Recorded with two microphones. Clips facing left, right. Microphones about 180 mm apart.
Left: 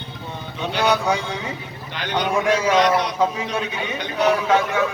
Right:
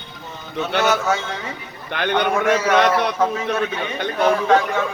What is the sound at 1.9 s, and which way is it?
Speech, 55° right (ahead or behind).